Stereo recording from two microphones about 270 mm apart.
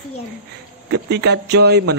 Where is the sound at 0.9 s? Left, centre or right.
Right.